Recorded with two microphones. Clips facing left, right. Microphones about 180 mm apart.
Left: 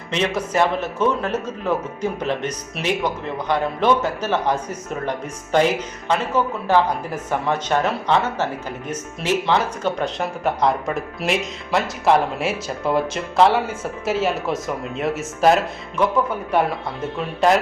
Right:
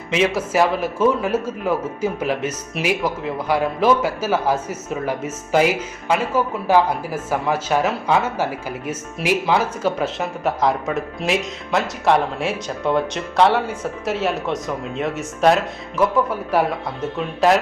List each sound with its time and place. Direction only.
0.1 s a man's voice: 5° right (ahead or behind)